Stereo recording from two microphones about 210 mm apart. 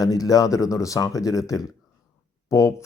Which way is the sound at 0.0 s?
15° left (ahead or behind).